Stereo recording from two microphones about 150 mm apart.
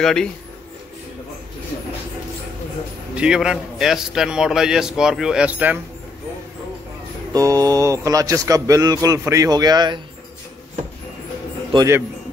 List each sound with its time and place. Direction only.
0.0 s a man's voice: 5° left (ahead or behind)
3.2 s a man's voice: 5° right (ahead or behind)
7.3 s speech: 25° right (ahead or behind)
11.7 s speech: 20° right (ahead or behind)